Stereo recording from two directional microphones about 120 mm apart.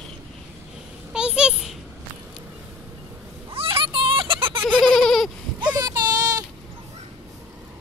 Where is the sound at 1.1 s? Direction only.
5° right (ahead or behind).